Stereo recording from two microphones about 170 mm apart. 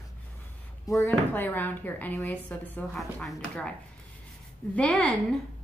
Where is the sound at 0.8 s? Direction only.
20° left (ahead or behind); by 3.7 s 5° left (ahead or behind).